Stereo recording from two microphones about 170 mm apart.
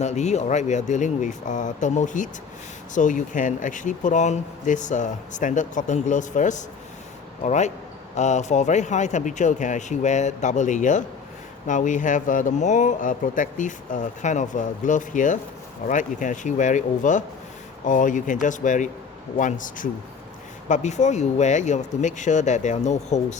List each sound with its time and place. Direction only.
0.0 s speech: 40° left (ahead or behind)